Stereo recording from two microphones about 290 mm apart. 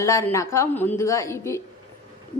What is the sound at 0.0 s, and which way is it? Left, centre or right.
A woman's voice, centre.